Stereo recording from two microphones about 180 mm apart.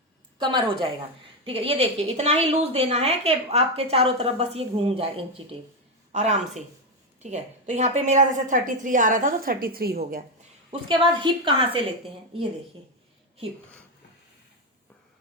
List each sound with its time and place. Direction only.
0.3 s a woman's voice: 25° right (ahead or behind); by 10.2 s 55° right (ahead or behind)
10.7 s a woman's voice: 25° right (ahead or behind)